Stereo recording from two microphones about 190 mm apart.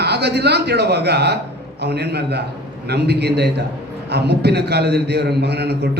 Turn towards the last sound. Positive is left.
turn(degrees=-60)  # may be behind; listen again after turning